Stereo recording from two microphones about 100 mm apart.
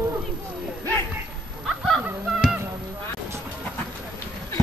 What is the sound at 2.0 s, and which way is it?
Honk, 5° right (ahead or behind).